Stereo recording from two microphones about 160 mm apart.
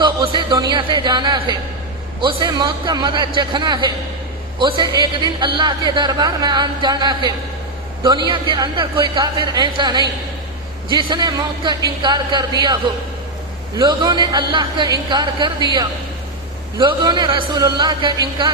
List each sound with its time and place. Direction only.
0.0 s a sound: 30° right (ahead or behind)
2.2 s a man's voice: 25° right (ahead or behind)
13.7 s a man's voice: 30° right (ahead or behind)